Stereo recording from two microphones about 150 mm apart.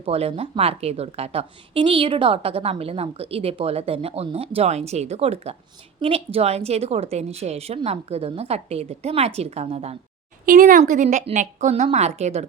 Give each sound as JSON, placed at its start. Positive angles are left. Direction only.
{"t": 0.0, "sound": "a woman's voice", "side_deg": -40}
{"t": 10.4, "sound": "a woman's voice", "side_deg": -65}